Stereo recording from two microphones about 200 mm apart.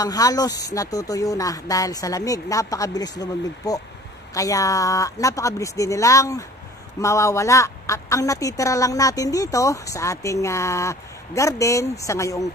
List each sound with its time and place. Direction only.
0.0 s a woman's voice: 20° left (ahead or behind)